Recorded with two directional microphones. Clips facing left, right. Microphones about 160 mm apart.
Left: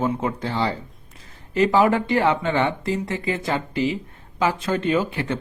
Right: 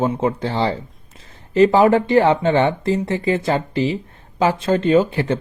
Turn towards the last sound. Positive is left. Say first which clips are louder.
# right 6 dB
turn(degrees=-30)  # may be behind; listen again after turning